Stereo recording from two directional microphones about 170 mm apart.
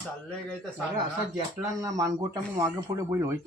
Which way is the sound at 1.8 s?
20° right (ahead or behind).